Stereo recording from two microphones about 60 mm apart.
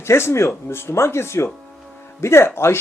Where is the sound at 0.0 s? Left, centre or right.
Left.